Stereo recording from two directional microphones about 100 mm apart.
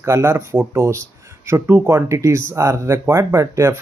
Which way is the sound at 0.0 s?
25° right (ahead or behind).